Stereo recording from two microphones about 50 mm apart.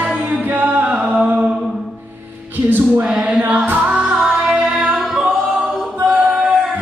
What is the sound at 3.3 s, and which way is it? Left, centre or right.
Music, right.